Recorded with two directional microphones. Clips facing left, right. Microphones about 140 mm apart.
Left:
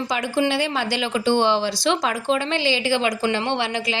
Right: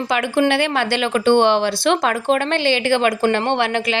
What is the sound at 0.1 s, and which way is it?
Speech, 60° right (ahead or behind).